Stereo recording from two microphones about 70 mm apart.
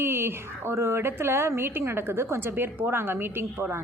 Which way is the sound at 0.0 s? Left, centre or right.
Right.